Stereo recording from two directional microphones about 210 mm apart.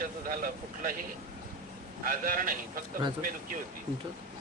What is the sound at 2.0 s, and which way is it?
Speech, 40° right (ahead or behind).